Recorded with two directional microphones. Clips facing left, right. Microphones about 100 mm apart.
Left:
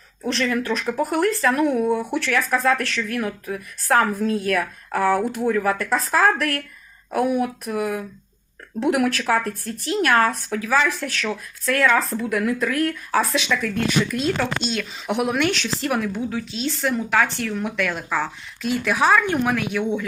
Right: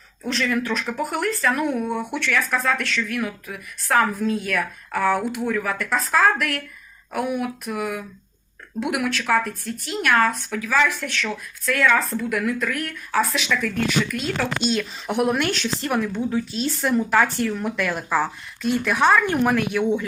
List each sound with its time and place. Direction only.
0.2 s speech: 35° left (ahead or behind)
14.0 s speech: centre (ahead or behind)
17.9 s speech: 10° right (ahead or behind)
18.6 s speech: centre (ahead or behind)